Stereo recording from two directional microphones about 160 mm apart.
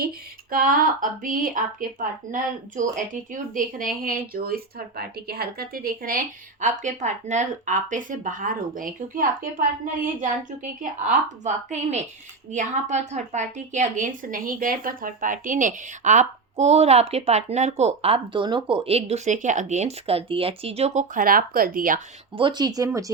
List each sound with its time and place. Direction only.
0.5 s a woman's voice: 60° right (ahead or behind)
22.4 s speech: 30° right (ahead or behind)